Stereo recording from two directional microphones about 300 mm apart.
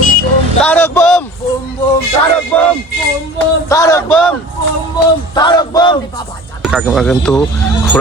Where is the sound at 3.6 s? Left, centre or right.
Centre.